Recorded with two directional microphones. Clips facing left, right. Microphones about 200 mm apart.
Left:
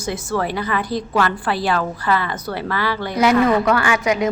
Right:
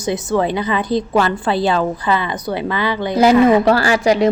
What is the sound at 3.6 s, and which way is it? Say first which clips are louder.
Speech: right 4 dB; 35° right (ahead or behind).